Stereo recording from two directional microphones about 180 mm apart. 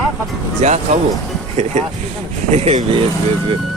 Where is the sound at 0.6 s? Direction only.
40° right (ahead or behind).